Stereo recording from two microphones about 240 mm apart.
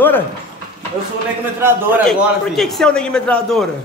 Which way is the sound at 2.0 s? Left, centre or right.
Centre.